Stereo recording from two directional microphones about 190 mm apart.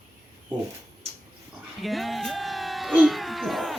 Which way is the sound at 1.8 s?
Centre (ahead or behind).